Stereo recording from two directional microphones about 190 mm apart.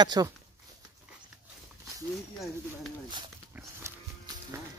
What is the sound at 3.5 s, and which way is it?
Livestock, 15° right (ahead or behind).